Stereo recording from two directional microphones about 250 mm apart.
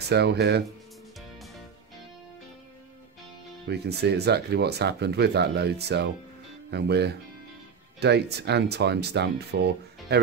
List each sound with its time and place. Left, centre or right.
0.1 s speech: right
3.6 s speech: right